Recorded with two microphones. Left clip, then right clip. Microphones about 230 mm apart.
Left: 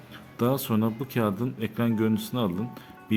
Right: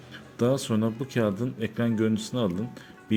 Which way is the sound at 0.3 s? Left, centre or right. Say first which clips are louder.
Right 1 dB; centre.